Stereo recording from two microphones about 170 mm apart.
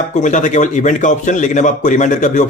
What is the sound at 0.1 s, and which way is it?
A man's voice, 45° left (ahead or behind).